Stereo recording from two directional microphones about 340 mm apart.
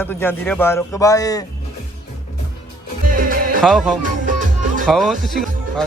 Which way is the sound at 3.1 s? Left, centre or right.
Right.